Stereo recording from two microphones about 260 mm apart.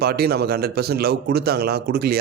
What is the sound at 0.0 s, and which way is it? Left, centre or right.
A man's voice, right.